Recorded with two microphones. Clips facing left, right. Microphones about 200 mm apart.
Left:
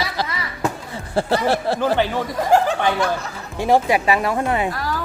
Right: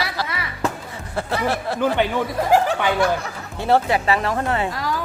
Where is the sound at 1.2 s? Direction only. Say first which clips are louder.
Left 4 dB; 30° left (ahead or behind).